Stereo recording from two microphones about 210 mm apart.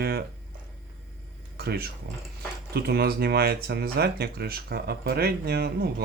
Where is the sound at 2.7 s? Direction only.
50° right (ahead or behind).